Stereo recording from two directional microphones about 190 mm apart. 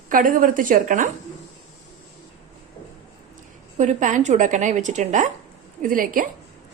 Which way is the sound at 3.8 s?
40° right (ahead or behind).